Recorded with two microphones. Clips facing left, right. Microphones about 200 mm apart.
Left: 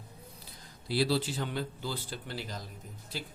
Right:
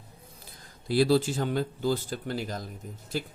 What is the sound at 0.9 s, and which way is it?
Speech, 50° right (ahead or behind).